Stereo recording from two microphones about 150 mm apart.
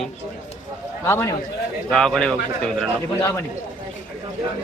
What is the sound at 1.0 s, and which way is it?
Speech, 20° left (ahead or behind).